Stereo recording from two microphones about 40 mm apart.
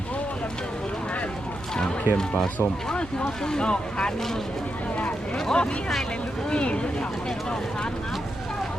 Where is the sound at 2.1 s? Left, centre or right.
Right.